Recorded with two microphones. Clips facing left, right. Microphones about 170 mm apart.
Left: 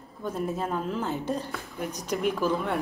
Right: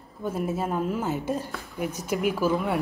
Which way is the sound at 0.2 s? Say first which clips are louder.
Right 2 dB; 10° right (ahead or behind).